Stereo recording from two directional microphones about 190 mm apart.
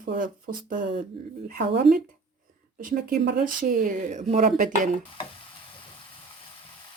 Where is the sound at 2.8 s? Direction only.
45° right (ahead or behind).